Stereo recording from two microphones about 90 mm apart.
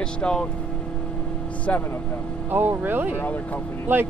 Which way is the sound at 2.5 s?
25° right (ahead or behind).